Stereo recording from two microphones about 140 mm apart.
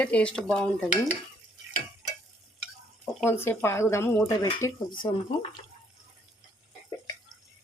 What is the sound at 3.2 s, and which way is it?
Speech, 15° left (ahead or behind).